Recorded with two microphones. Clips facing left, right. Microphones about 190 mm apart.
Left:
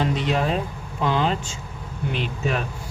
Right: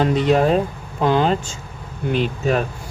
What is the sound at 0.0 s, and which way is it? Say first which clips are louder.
Speech: right 7 dB; 45° right (ahead or behind).